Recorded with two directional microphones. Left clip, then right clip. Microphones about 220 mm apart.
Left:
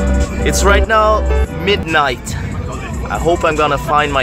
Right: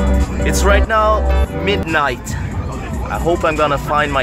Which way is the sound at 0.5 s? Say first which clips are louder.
Left 2 dB; 15° left (ahead or behind).